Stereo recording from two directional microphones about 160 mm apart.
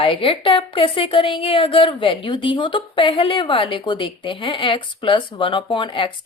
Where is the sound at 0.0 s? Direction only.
35° left (ahead or behind).